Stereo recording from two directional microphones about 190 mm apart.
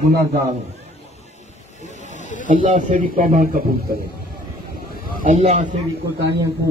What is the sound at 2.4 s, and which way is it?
Speech, 40° right (ahead or behind).